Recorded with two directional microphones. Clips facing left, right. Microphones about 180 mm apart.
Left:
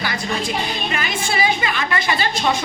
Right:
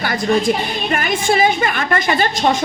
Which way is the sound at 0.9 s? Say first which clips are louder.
Right 8 dB; 50° right (ahead or behind).